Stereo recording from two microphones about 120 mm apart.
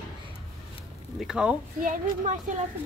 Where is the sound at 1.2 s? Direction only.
5° right (ahead or behind).